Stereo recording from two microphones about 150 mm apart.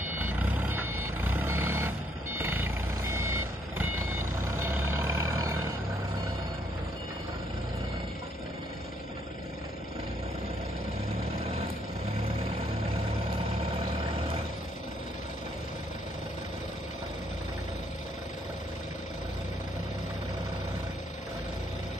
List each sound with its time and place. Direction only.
0.0 s vehicle: 15° right (ahead or behind)